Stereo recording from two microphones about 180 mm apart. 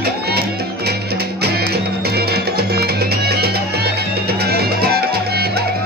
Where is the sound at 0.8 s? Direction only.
60° right (ahead or behind).